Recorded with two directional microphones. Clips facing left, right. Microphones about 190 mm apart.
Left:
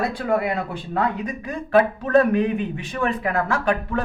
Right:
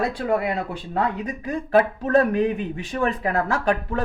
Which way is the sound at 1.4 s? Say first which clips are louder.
Left 1 dB; 40° right (ahead or behind).